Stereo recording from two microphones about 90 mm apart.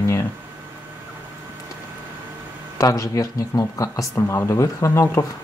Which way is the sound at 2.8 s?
40° left (ahead or behind).